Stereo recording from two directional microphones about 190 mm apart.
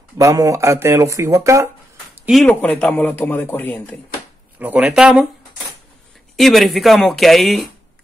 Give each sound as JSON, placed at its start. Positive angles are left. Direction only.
{"t": 0.2, "sound": "speech", "side_deg": -15}
{"t": 2.2, "sound": "a man's voice", "side_deg": 5}
{"t": 4.6, "sound": "speech", "side_deg": -10}
{"t": 6.3, "sound": "speech", "side_deg": 0}